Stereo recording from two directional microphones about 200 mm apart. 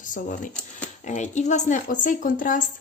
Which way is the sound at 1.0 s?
35° left (ahead or behind).